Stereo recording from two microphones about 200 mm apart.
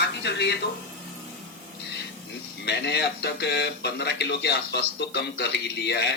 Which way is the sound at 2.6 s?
55° left (ahead or behind).